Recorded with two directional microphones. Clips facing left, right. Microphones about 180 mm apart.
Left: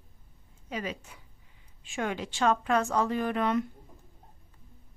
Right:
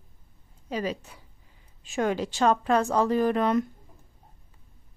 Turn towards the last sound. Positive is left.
turn(degrees=-40)  # may be behind; listen again after turning